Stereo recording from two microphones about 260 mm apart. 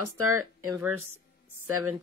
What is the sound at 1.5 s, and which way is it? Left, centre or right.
Speech, right.